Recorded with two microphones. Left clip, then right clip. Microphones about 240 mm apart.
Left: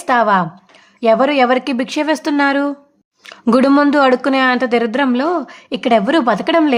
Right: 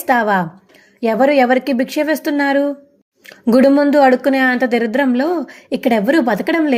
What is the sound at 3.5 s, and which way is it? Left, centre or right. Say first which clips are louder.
A woman's voice: even; centre.